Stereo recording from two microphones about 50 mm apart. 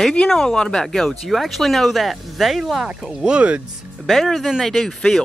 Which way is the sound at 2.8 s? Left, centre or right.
Centre.